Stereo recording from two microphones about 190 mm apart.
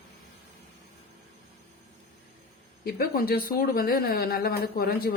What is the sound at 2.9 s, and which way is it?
Speech, 50° left (ahead or behind).